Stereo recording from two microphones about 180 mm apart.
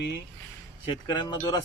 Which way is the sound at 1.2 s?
25° left (ahead or behind).